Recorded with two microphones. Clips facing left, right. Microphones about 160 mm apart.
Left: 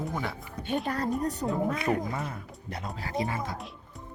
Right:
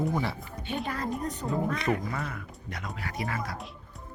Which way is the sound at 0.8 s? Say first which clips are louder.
Left 3 dB; 40° left (ahead or behind).